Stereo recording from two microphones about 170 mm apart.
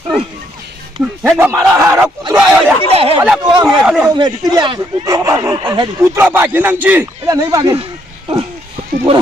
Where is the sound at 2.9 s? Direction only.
35° right (ahead or behind).